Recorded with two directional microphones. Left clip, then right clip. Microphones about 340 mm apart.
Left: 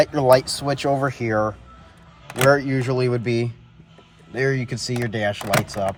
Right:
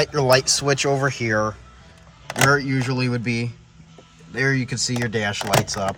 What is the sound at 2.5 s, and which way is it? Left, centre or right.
Speech, centre.